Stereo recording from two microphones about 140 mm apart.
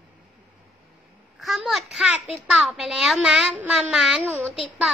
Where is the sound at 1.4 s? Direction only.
Centre (ahead or behind).